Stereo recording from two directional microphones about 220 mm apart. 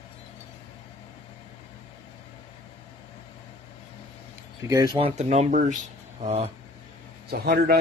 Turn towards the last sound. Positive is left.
turn(degrees=-45)  # may be behind; listen again after turning